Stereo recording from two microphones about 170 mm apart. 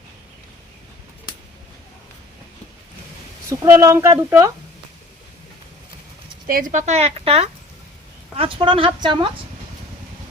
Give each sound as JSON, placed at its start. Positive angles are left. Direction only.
{"t": 3.5, "sound": "speech", "side_deg": -20}
{"t": 6.5, "sound": "a woman's voice", "side_deg": -50}